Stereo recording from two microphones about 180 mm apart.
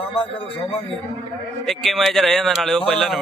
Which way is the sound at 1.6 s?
Centre (ahead or behind).